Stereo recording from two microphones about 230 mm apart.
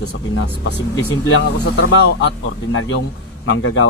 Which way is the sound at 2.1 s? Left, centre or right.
Left.